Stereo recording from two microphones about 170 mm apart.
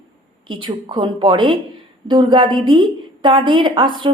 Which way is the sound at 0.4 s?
30° right (ahead or behind).